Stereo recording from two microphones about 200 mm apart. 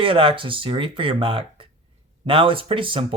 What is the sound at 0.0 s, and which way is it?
Speech, 25° right (ahead or behind).